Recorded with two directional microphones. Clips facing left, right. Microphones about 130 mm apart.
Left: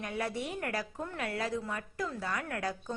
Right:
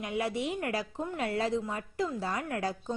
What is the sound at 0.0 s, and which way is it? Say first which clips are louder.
A woman's voice: right 4 dB; 20° right (ahead or behind).